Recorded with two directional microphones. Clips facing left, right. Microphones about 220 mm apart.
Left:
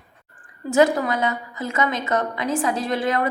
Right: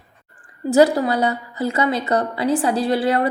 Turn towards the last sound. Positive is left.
turn(degrees=-35)  # may be behind; listen again after turning